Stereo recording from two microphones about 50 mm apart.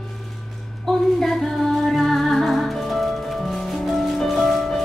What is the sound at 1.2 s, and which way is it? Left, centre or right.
Music, centre.